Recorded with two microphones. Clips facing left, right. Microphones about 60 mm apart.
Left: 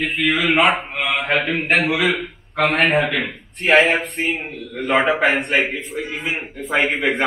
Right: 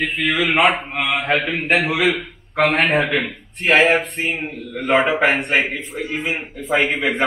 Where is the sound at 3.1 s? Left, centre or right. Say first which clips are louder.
Right 2 dB; centre.